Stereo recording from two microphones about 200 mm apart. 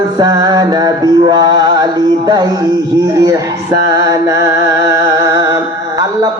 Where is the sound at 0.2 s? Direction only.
20° right (ahead or behind).